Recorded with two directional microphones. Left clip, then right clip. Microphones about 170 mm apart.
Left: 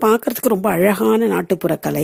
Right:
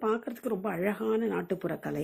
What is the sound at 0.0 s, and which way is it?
A woman's voice, 75° left (ahead or behind).